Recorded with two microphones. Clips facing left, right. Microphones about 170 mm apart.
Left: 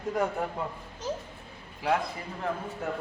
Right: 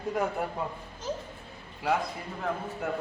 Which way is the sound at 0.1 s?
5° right (ahead or behind).